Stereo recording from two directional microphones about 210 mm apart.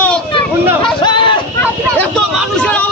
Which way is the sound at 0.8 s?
25° left (ahead or behind).